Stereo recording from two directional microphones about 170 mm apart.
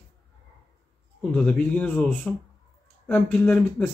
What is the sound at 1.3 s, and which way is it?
Speech, 5° left (ahead or behind).